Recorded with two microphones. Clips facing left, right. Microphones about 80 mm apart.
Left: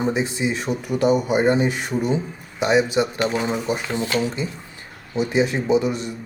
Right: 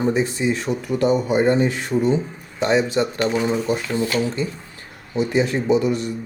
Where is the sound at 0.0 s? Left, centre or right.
Centre.